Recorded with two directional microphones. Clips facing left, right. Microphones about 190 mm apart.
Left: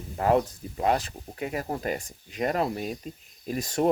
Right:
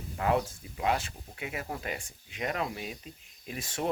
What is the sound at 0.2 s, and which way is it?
Speech, 40° left (ahead or behind).